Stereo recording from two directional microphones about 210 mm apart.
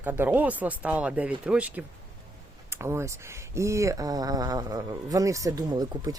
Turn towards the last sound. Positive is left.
turn(degrees=-20)  # may be behind; listen again after turning